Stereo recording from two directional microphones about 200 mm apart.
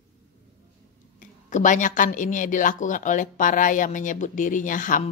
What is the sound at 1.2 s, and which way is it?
Speech, 40° left (ahead or behind).